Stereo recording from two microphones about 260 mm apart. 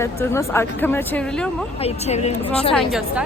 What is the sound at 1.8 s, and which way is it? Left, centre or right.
Speech, left.